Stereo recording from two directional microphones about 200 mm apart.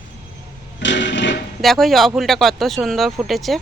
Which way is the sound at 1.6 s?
Centre (ahead or behind).